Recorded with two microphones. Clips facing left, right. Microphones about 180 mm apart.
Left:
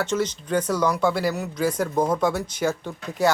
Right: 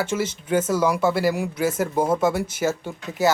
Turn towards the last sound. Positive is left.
turn(degrees=-5)  # may be behind; listen again after turning